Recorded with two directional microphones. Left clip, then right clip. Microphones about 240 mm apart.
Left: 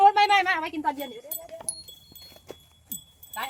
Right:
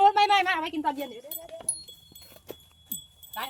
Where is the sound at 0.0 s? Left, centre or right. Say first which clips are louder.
Left 2 dB; centre.